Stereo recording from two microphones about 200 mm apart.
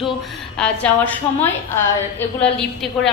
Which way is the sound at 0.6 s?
5° left (ahead or behind).